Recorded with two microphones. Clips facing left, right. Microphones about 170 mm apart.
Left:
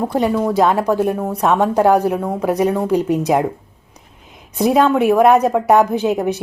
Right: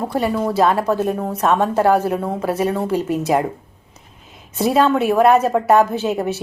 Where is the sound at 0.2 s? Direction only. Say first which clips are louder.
Left 2 dB; 15° left (ahead or behind).